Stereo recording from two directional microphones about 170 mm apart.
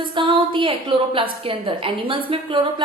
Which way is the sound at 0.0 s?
30° right (ahead or behind).